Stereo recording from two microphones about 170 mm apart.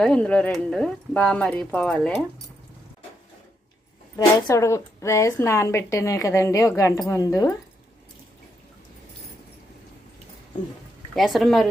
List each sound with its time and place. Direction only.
0.0 s speech: 5° left (ahead or behind)
4.4 s a woman's voice: 15° left (ahead or behind)
11.1 s speech: centre (ahead or behind)